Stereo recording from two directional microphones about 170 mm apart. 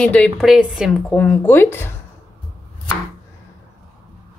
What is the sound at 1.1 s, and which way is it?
Speech, 10° left (ahead or behind).